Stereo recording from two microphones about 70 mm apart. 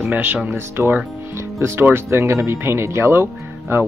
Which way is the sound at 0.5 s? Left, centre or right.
Right.